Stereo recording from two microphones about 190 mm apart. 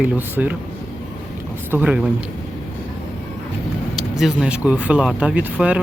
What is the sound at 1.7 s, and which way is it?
Speech, 5° right (ahead or behind).